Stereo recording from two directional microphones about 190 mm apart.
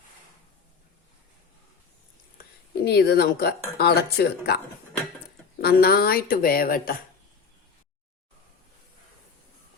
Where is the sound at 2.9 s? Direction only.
55° left (ahead or behind).